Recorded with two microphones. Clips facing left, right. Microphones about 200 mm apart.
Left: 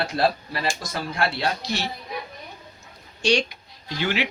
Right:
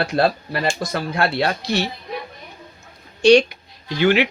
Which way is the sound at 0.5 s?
60° right (ahead or behind).